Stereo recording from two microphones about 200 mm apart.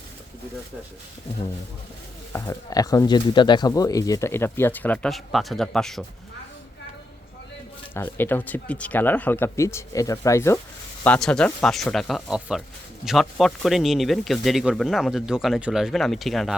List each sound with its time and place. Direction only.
2.3 s speech: 15° left (ahead or behind)
7.9 s speech: 10° left (ahead or behind)